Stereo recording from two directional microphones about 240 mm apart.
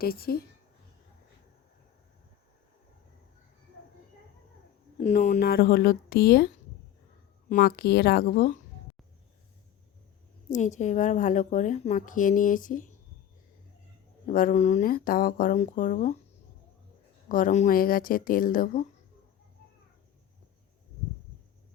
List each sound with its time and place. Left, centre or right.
0.0 s a woman's voice: left
4.9 s a woman's voice: left
7.5 s a woman's voice: left
10.5 s a woman's voice: left
14.3 s a woman's voice: left
17.2 s a woman's voice: left